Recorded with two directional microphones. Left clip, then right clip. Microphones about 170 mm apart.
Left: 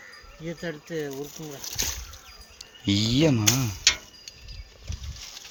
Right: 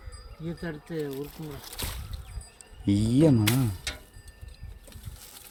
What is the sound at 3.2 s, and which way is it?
Speech, 25° right (ahead or behind).